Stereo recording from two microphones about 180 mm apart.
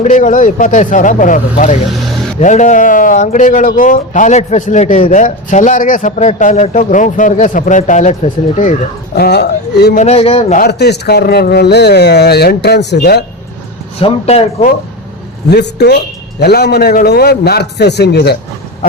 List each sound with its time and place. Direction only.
0.0 s a man's voice: 45° left (ahead or behind)
9.1 s speech: 65° left (ahead or behind)
9.9 s speech: 40° left (ahead or behind)
10.6 s speech: 65° left (ahead or behind)
14.0 s speech: 35° left (ahead or behind)
15.4 s a woman's voice: 65° left (ahead or behind)